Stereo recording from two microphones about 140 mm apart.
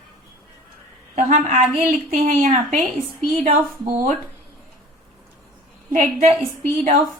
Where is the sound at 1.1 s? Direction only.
60° right (ahead or behind).